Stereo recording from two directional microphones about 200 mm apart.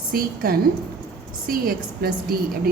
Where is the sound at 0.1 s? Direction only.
50° right (ahead or behind).